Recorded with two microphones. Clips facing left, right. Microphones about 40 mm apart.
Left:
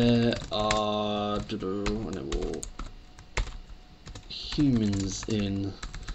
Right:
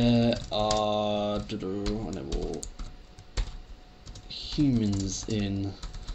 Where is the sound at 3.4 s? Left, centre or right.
Left.